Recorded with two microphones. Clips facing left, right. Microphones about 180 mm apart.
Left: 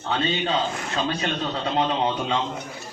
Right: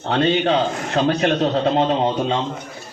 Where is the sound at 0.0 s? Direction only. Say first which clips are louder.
Right 7 dB; 65° right (ahead or behind).